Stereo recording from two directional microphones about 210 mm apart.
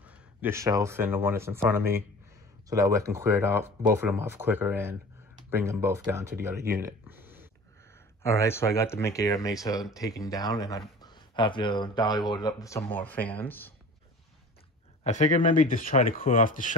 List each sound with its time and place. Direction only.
0.0 s speech: 5° right (ahead or behind)
6.7 s a sound: 15° right (ahead or behind)
8.2 s speech: 15° left (ahead or behind)
15.0 s speech: 35° left (ahead or behind)